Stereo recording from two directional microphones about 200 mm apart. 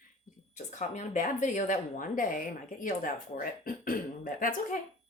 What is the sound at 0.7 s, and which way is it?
A woman's voice, 35° left (ahead or behind).